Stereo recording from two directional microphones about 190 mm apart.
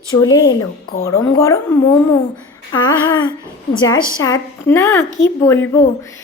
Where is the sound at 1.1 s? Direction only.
15° left (ahead or behind).